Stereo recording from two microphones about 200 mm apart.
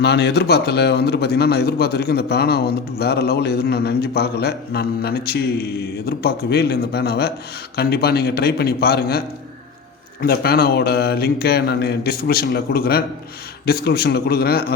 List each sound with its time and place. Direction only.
0.0 s a man's voice: 55° left (ahead or behind)